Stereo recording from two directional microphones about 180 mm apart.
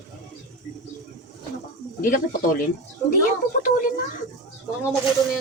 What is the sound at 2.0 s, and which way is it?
Speech, 55° left (ahead or behind).